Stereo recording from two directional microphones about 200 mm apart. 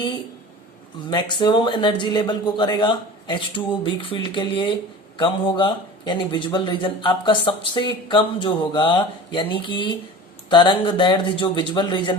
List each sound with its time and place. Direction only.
1.1 s a man's voice: 20° left (ahead or behind)